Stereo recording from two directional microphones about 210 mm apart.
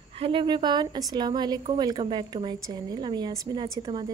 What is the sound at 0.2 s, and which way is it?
A woman's voice, 25° right (ahead or behind).